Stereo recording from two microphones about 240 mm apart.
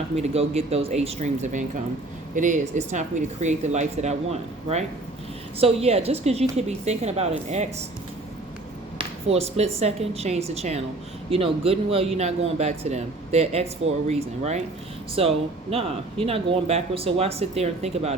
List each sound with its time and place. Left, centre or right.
0.2 s speech: right
9.0 s speech: right